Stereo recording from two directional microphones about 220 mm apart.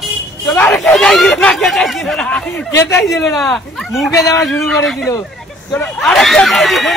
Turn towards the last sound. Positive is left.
turn(degrees=0)  # may be behind; listen again after turning